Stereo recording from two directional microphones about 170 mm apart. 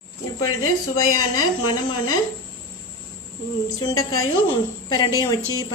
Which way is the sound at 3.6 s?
20° left (ahead or behind).